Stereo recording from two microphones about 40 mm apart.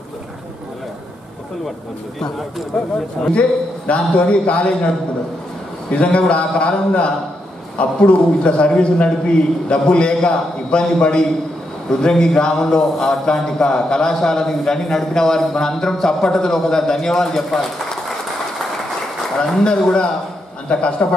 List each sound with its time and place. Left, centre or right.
3.3 s a man's voice: left; by 18.1 s centre
19.3 s a man's voice: centre